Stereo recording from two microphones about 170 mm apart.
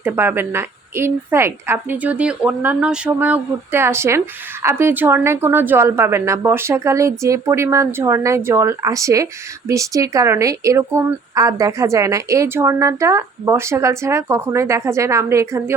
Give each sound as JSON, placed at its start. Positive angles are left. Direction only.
{"t": 0.0, "sound": "a woman's voice", "side_deg": -10}